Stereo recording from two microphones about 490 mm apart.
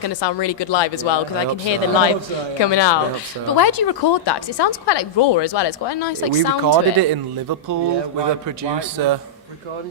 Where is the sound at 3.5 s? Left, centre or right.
Left.